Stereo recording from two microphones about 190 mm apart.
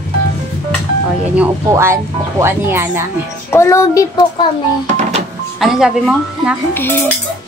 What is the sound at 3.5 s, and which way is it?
Speech, 15° left (ahead or behind).